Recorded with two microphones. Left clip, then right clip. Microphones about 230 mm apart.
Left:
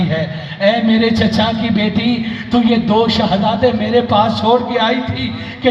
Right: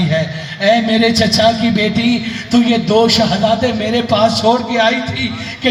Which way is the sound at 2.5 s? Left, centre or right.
Right.